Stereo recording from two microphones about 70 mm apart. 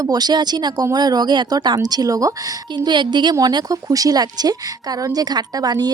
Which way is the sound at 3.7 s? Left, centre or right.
Right.